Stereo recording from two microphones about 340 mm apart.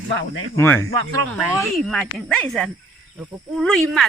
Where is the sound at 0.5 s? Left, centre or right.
Centre.